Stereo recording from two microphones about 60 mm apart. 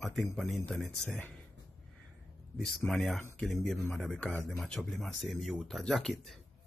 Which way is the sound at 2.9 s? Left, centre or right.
Centre.